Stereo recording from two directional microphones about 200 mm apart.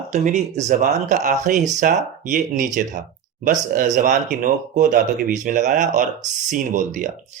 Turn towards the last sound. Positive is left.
turn(degrees=-40)  # may be behind; listen again after turning